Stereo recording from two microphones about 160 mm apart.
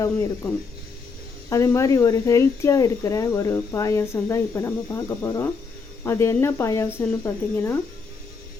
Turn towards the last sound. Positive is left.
turn(degrees=15)  # may be behind; listen again after turning